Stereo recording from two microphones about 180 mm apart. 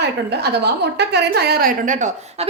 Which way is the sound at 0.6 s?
65° right (ahead or behind).